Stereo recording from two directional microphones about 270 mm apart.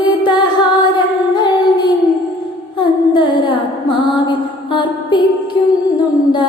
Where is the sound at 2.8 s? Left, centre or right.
Centre.